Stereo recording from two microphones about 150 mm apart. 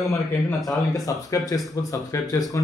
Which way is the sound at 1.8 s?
25° left (ahead or behind).